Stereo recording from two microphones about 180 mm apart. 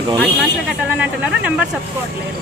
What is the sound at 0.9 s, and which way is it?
Speech, 5° right (ahead or behind).